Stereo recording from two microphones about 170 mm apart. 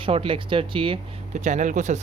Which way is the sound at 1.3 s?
45° right (ahead or behind).